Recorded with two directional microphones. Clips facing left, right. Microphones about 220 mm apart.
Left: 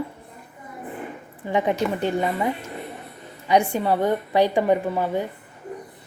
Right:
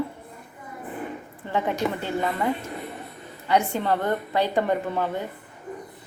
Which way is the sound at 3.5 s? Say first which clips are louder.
Left 3 dB; 15° left (ahead or behind).